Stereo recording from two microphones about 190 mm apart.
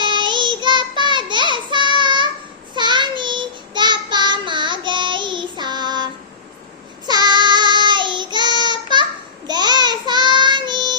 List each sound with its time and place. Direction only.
0.0 s child singing: 25° right (ahead or behind)
7.1 s child singing: 20° right (ahead or behind)